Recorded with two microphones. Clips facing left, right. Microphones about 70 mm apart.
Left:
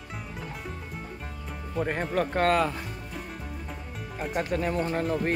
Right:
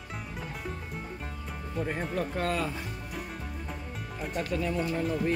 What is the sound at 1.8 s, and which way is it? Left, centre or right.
Speech, left.